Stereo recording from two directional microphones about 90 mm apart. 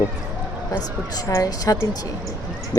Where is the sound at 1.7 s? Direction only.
35° left (ahead or behind).